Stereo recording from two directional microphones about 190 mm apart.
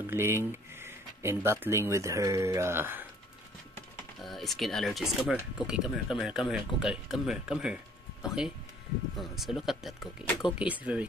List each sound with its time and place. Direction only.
0.0 s speech: 10° right (ahead or behind)
4.2 s speech: centre (ahead or behind)